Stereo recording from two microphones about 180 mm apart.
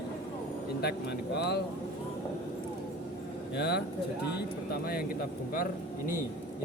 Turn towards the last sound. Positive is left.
turn(degrees=50)  # may be behind; listen again after turning